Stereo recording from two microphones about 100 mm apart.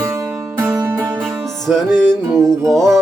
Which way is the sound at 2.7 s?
5° left (ahead or behind).